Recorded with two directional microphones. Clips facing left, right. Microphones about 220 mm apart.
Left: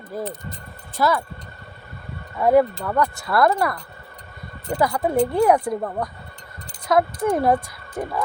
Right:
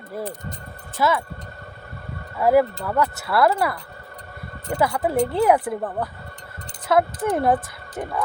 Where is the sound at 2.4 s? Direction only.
5° right (ahead or behind).